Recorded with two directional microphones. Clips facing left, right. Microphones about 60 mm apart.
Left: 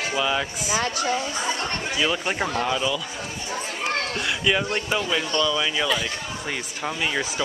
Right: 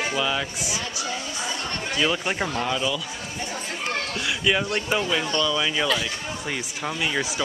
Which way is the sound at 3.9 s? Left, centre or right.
Centre.